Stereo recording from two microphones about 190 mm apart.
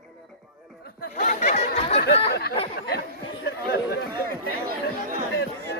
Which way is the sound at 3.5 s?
55° left (ahead or behind).